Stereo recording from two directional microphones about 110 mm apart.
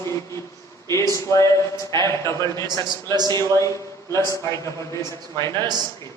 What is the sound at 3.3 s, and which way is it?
Speech, 25° left (ahead or behind).